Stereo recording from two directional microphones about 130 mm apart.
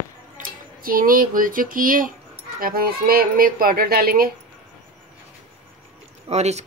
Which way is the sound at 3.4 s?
90° right.